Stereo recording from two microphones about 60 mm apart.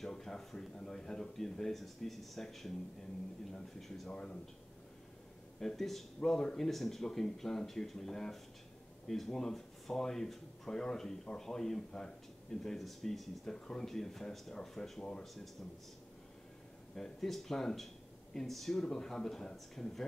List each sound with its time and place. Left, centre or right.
0.0 s speech: centre
4.1 s speech: centre
5.6 s speech: centre
16.9 s speech: centre